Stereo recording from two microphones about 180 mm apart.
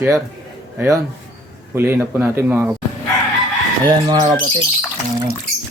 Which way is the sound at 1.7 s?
15° right (ahead or behind).